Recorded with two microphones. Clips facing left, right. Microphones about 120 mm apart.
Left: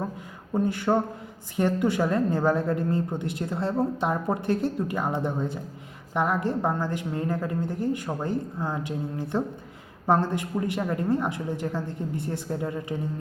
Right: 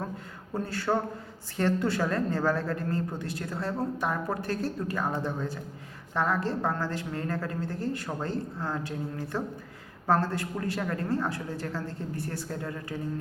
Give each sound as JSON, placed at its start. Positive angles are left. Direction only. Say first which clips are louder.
{"t": 0.5, "sound": "a woman's voice", "louder": "left 5 dB", "side_deg": 15}